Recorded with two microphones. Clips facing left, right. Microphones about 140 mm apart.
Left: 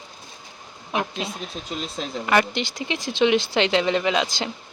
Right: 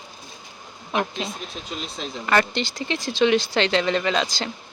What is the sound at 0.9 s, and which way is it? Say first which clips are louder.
Speech: right 1 dB; 10° left (ahead or behind).